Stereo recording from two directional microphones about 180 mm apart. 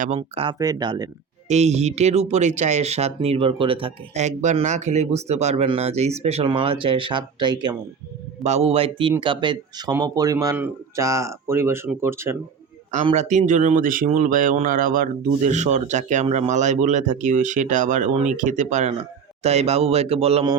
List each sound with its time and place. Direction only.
0.2 s speech: 30° right (ahead or behind)
1.5 s speech: 40° right (ahead or behind)
8.4 s speech: 35° right (ahead or behind); by 12.4 s 15° right (ahead or behind)
13.1 s speech: 40° right (ahead or behind)